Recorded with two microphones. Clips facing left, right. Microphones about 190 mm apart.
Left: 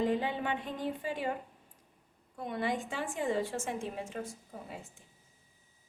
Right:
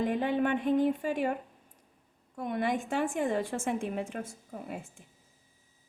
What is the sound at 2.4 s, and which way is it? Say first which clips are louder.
A woman's voice: right 3 dB; 55° right (ahead or behind).